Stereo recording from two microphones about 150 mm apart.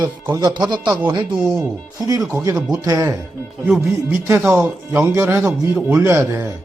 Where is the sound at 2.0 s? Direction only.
20° right (ahead or behind).